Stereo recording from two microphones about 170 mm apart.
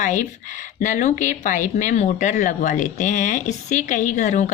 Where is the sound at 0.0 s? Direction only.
45° left (ahead or behind).